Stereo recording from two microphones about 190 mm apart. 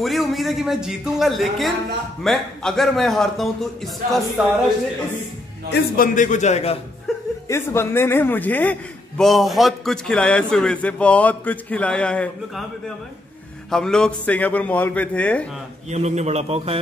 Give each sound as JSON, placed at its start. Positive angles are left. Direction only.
{"t": 0.0, "sound": "a man's voice", "side_deg": 0}
{"t": 5.7, "sound": "a man's voice", "side_deg": 45}
{"t": 7.4, "sound": "a man's voice", "side_deg": 15}
{"t": 15.9, "sound": "a man's voice", "side_deg": -35}